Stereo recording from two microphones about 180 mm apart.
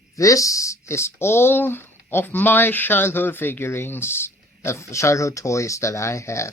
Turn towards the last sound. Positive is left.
turn(degrees=15)  # may be behind; listen again after turning